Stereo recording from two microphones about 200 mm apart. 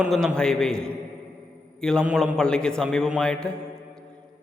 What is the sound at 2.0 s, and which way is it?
A man's voice, centre (ahead or behind).